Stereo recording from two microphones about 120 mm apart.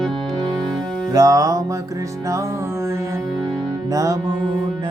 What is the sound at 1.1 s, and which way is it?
Music, 30° right (ahead or behind).